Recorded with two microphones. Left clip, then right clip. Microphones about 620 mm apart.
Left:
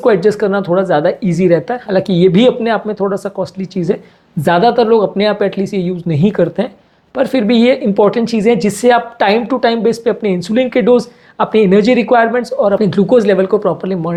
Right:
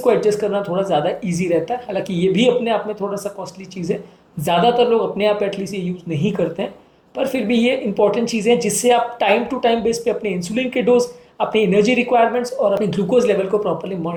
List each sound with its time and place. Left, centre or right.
0.0 s speech: left
3.4 s speech: left
13.5 s speech: left